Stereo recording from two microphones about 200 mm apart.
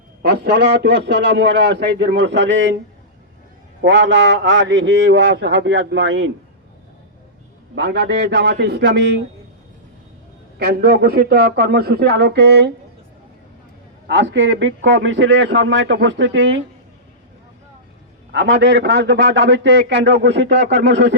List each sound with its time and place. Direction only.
0.2 s a man's voice: 55° right (ahead or behind)
3.8 s a man's voice: 65° right (ahead or behind)
7.8 s a man's voice: 60° right (ahead or behind)
10.6 s speech: 50° right (ahead or behind)
14.1 s a man's voice: 60° right (ahead or behind)
18.3 s a man's voice: 60° right (ahead or behind)